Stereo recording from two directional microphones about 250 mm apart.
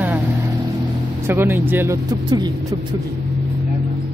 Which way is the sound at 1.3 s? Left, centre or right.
Centre.